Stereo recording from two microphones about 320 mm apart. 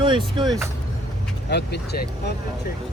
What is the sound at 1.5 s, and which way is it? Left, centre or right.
Speech, left.